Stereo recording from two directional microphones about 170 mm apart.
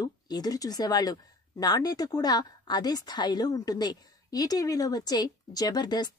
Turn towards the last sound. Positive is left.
turn(degrees=25)  # may be behind; listen again after turning